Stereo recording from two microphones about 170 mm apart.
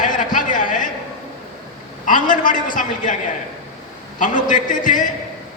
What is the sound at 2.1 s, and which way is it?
A man's voice, 50° left (ahead or behind).